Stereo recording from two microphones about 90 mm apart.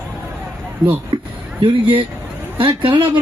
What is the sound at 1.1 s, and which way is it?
Speech, 65° right (ahead or behind).